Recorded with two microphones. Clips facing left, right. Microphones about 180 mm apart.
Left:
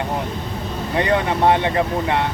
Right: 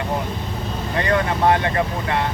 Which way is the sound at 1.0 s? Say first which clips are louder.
Left 2 dB; 20° left (ahead or behind).